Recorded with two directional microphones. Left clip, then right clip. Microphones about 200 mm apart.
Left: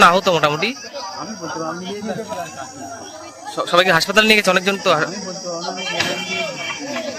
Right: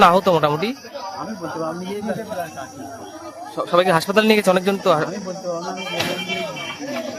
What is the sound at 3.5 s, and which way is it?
Speech, 10° right (ahead or behind).